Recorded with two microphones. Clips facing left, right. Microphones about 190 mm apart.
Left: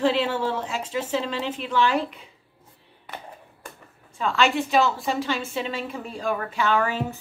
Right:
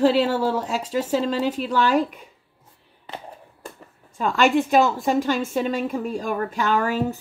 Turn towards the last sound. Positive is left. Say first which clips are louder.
# right 2 dB
turn(degrees=-40)  # may be behind; listen again after turning